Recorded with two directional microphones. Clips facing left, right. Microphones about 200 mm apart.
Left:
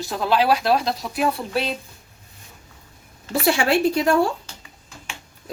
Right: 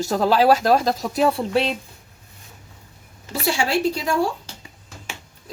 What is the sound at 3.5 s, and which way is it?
Speech, 60° left (ahead or behind).